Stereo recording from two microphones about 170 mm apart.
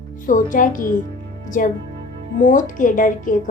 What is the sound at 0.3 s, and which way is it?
Speech, 50° left (ahead or behind).